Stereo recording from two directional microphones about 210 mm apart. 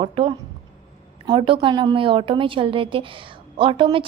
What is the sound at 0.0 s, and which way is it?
A woman's voice, 25° right (ahead or behind).